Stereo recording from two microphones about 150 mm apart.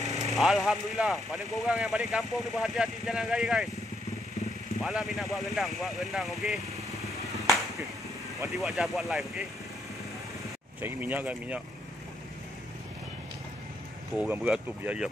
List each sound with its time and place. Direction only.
0.0 s a sound: 45° right (ahead or behind)
0.4 s speech: centre (ahead or behind)
4.8 s speech: centre (ahead or behind)
8.5 s speech: centre (ahead or behind)
10.8 s speech: 10° right (ahead or behind)
14.1 s speech: 5° right (ahead or behind)